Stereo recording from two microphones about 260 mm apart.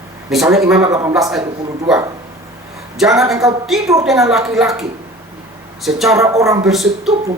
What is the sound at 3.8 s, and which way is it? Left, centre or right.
Speech, centre.